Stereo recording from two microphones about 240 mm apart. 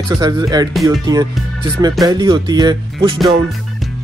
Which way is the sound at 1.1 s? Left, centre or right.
Centre.